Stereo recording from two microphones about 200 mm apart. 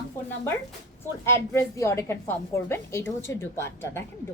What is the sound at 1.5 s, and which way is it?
A woman's voice, 15° left (ahead or behind).